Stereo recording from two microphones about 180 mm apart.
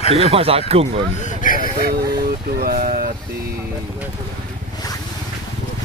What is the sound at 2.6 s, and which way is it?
Speech, 50° right (ahead or behind).